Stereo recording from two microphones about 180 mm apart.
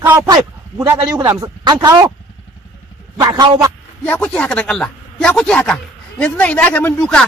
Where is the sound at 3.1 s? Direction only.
20° right (ahead or behind).